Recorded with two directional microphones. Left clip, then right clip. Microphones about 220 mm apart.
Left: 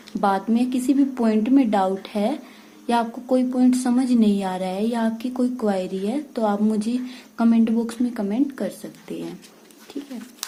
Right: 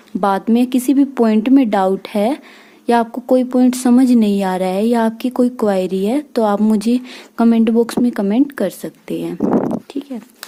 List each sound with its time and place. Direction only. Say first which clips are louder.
0.2 s speech: right 6 dB; 45° right (ahead or behind)